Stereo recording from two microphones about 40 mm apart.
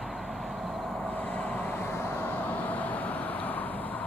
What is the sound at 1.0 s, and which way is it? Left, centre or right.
Vehicle, left.